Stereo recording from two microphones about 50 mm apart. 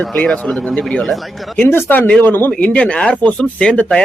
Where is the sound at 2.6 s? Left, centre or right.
Left.